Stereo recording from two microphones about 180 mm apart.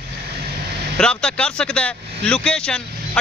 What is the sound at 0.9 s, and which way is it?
Speech, 5° left (ahead or behind).